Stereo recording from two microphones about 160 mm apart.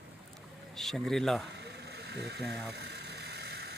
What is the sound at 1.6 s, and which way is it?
Vehicle, 90° right.